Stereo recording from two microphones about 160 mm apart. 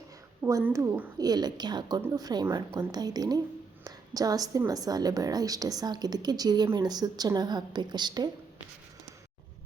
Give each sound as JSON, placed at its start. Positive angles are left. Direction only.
{"t": 0.6, "sound": "a woman's voice", "side_deg": -15}